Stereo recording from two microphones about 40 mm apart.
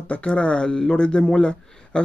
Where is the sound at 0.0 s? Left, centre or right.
Left.